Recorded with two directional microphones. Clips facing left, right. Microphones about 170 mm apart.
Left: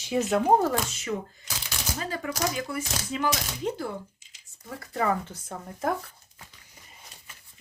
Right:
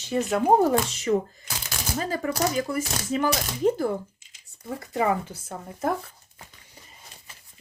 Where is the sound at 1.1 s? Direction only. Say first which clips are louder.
Right 8 dB; 35° right (ahead or behind).